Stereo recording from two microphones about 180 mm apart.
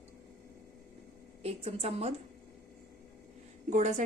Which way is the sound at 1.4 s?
35° right (ahead or behind).